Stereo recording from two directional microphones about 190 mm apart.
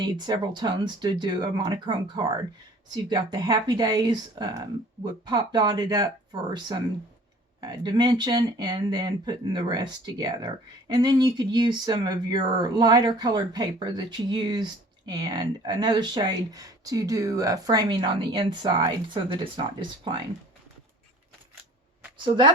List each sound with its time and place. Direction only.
0.0 s speech: 25° right (ahead or behind)
22.2 s speech: 25° right (ahead or behind)